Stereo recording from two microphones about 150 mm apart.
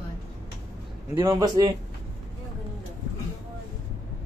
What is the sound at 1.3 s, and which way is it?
Speech, 30° right (ahead or behind).